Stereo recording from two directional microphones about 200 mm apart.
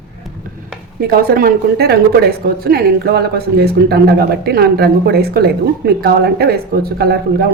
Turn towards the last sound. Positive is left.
turn(degrees=-50)  # may be behind; listen again after turning